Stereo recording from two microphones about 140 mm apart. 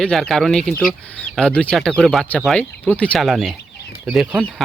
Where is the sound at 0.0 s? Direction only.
5° left (ahead or behind).